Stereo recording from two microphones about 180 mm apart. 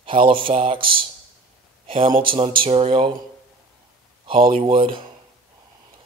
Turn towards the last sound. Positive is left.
turn(degrees=-25)  # may be behind; listen again after turning